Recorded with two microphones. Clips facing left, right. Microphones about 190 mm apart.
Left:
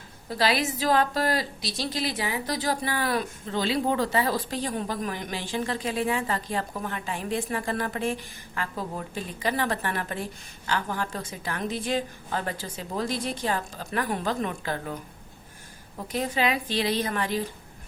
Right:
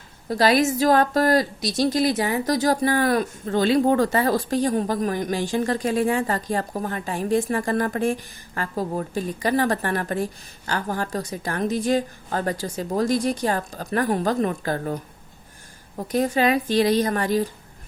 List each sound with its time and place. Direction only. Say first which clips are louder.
0.3 s a woman's voice: right 7 dB; 45° right (ahead or behind)
16.1 s a woman's voice: right 6 dB; 45° right (ahead or behind)